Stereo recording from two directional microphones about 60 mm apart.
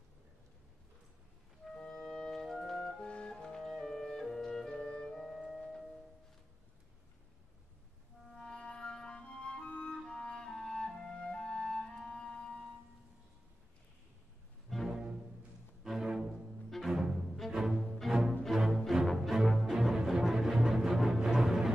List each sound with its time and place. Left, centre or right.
2.0 s music: centre
2.8 s organ: centre
3.6 s music: centre
4.7 s music: centre
5.1 s music: centre
8.3 s music: centre
14.9 s music: centre